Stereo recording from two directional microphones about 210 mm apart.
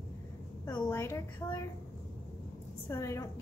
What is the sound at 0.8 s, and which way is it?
Speech, 10° left (ahead or behind).